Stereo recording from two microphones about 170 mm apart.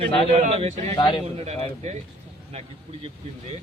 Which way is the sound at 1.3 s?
40° right (ahead or behind).